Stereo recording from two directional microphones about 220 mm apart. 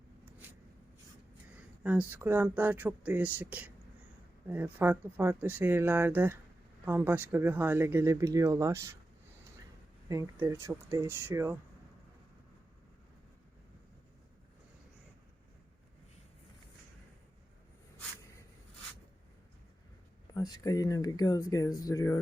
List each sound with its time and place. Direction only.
0.3 s a sound: 10° right (ahead or behind)
1.5 s speech: 5° right (ahead or behind)
10.1 s speech: 15° right (ahead or behind)
20.3 s speech: 20° left (ahead or behind)